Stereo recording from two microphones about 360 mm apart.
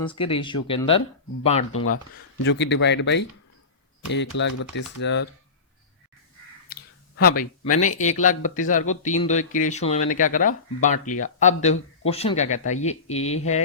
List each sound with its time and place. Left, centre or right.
0.3 s speech: centre
1.7 s speech: left
4.4 s speech: left
6.7 s a sound: left
7.8 s speech: centre